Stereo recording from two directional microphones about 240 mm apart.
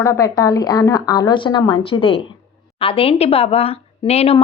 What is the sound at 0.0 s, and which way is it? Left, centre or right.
A woman's voice, centre.